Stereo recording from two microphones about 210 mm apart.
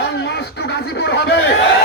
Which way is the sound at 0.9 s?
55° left (ahead or behind).